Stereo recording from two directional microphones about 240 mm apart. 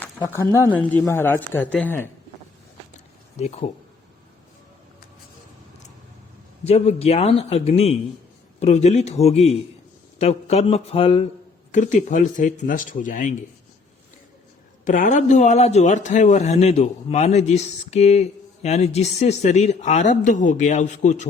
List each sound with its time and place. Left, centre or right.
0.3 s speech: centre
3.3 s a man's voice: left
6.7 s a man's voice: left
14.8 s a man's voice: left